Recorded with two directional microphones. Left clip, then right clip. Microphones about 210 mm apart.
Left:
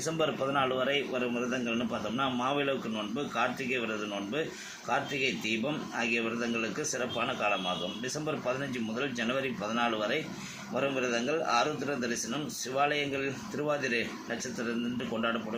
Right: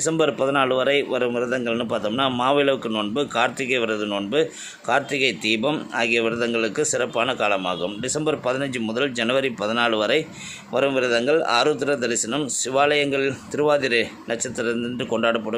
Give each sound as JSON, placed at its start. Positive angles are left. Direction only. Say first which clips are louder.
{"t": 0.0, "sound": "a man's voice", "louder": "right 10 dB", "side_deg": -50}